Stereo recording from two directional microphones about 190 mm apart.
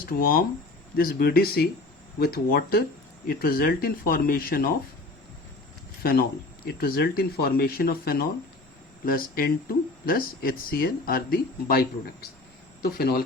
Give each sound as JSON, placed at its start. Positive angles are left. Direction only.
{"t": 0.2, "sound": "speech", "side_deg": 50}
{"t": 6.0, "sound": "speech", "side_deg": 50}